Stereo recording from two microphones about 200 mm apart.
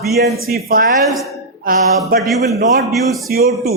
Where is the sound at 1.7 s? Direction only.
45° right (ahead or behind).